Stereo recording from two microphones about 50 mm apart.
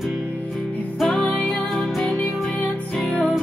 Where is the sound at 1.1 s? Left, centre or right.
Left.